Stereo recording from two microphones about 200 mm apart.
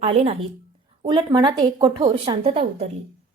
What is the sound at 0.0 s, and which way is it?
Speech, 30° right (ahead or behind).